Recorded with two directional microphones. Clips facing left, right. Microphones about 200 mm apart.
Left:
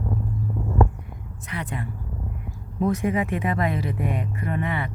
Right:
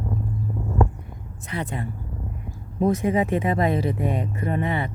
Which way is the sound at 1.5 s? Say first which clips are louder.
Right 2 dB; 30° right (ahead or behind).